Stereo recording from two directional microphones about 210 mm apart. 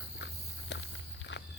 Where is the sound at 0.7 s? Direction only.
55° left (ahead or behind).